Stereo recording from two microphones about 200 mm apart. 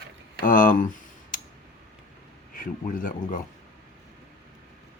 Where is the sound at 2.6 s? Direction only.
45° left (ahead or behind).